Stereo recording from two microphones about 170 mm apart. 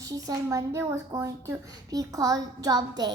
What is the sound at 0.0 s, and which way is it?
Speech, 20° right (ahead or behind).